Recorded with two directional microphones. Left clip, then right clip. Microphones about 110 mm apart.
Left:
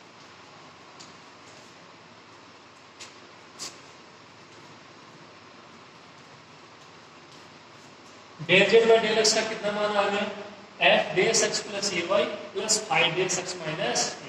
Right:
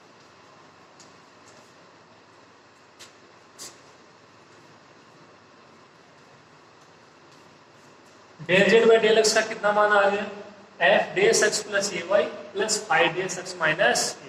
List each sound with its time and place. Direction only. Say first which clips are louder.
8.4 s a man's voice: right 1 dB; 30° right (ahead or behind)